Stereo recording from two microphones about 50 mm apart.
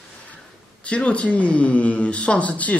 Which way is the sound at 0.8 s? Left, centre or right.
Left.